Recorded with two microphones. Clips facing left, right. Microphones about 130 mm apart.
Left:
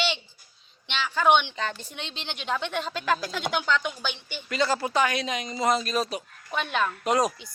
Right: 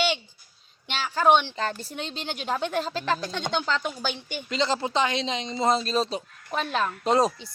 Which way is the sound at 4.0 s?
45° right (ahead or behind).